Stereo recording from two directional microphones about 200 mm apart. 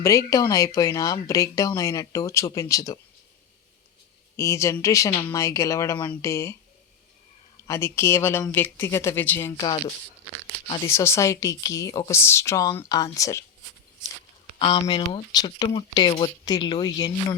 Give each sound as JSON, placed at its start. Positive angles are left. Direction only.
{"t": 0.0, "sound": "speech", "side_deg": 15}
{"t": 4.4, "sound": "speech", "side_deg": 15}
{"t": 10.8, "sound": "speech", "side_deg": 15}
{"t": 14.4, "sound": "speech", "side_deg": 30}